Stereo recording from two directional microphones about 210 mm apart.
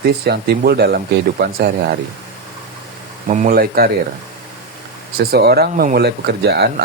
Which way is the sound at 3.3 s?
35° right (ahead or behind).